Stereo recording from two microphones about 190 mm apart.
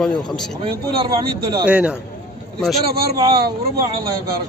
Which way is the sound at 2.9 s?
55° right (ahead or behind).